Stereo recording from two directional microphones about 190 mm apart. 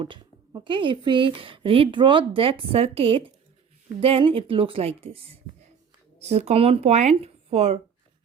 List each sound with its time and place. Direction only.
0.0 s a woman's voice: 25° right (ahead or behind)